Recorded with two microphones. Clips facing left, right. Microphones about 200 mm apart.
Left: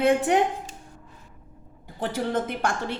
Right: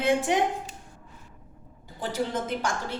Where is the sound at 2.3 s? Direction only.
55° left (ahead or behind).